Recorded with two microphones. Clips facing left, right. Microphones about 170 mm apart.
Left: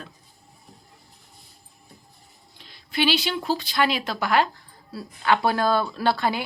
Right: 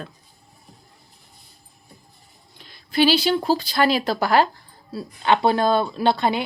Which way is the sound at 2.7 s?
35° right (ahead or behind).